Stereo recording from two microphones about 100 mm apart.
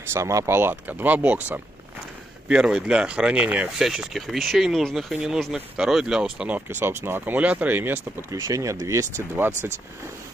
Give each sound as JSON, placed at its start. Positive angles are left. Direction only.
{"t": 0.0, "sound": "speech", "side_deg": -30}
{"t": 6.8, "sound": "speech", "side_deg": -25}
{"t": 8.0, "sound": "speech", "side_deg": -35}